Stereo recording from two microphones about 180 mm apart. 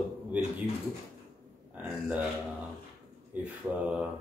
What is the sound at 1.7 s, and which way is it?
Speech, 10° right (ahead or behind).